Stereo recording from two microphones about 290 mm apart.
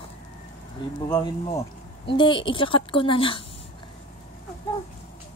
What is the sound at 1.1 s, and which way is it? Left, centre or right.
Speech, centre.